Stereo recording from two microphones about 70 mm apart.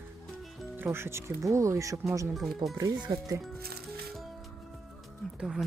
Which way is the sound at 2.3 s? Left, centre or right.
Centre.